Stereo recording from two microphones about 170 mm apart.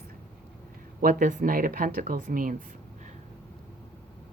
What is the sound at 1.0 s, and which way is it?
Speech, 55° right (ahead or behind).